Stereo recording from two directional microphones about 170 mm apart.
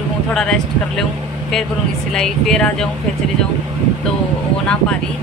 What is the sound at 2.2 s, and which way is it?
Speech, 5° left (ahead or behind).